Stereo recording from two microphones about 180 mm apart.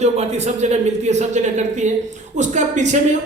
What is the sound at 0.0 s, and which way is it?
A man's voice, 40° right (ahead or behind).